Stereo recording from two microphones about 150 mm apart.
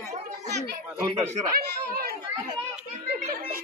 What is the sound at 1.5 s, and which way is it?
Speech, 90° right.